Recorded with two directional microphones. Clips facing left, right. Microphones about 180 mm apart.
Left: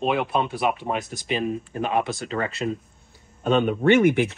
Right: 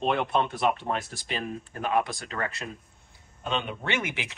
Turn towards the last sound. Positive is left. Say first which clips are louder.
# left 15 dB
turn(degrees=55)  # may be behind; listen again after turning